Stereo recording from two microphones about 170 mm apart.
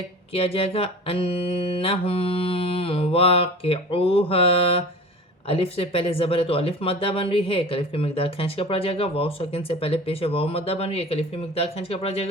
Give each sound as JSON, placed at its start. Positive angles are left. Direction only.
{"t": 0.3, "sound": "speech", "side_deg": 35}